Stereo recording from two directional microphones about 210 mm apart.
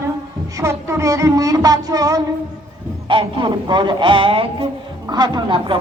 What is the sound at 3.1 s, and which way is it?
A man's voice, 25° right (ahead or behind).